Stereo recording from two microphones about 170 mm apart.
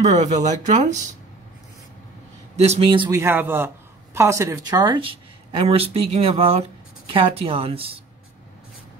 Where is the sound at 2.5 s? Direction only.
40° right (ahead or behind).